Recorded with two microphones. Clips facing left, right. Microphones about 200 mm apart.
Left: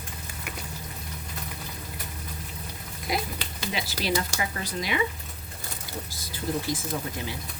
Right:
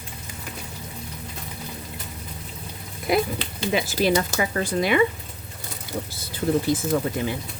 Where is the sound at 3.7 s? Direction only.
45° right (ahead or behind).